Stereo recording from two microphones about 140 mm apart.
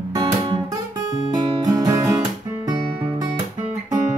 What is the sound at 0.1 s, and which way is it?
Music, 30° right (ahead or behind).